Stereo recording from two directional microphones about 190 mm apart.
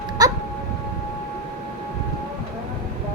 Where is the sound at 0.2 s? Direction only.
20° right (ahead or behind).